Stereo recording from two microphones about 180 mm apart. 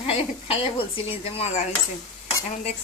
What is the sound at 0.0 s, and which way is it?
Speech, 30° left (ahead or behind).